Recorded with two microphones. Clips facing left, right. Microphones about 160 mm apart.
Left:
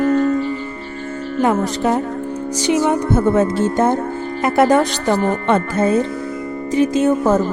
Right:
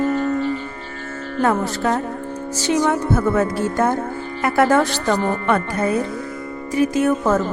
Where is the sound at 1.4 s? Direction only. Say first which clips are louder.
Left 2 dB; 15° left (ahead or behind).